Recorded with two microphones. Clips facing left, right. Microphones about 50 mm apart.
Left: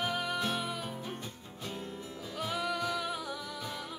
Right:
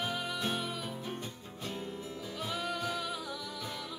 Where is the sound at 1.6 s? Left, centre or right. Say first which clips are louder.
Right 1 dB; centre.